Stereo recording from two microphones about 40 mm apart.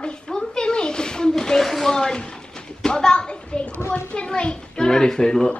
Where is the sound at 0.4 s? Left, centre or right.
Left.